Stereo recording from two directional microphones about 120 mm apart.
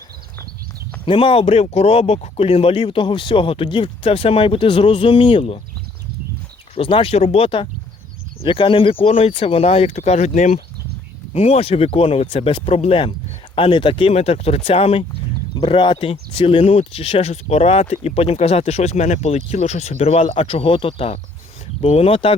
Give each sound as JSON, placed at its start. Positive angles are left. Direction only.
{"t": 1.0, "sound": "speech", "side_deg": 45}
{"t": 6.7, "sound": "speech", "side_deg": 45}
{"t": 11.3, "sound": "speech", "side_deg": 60}
{"t": 14.1, "sound": "speech", "side_deg": 60}
{"t": 15.5, "sound": "speech", "side_deg": 45}